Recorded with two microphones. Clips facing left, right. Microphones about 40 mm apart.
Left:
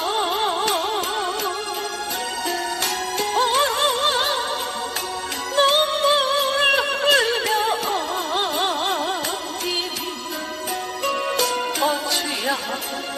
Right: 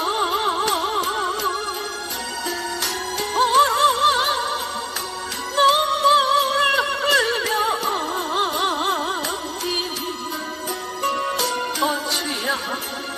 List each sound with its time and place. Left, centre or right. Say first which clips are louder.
0.0 s music: right 1 dB; left
2.8 s music: left 2 dB; left
5.5 s music: right 1 dB; left
8.5 s carnatic music: right 1 dB; left
11.0 s music: even; left